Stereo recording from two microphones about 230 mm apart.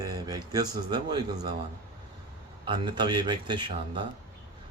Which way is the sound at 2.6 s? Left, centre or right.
Centre.